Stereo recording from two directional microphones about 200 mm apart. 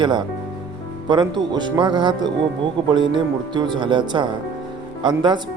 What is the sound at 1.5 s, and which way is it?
Speech, 20° right (ahead or behind).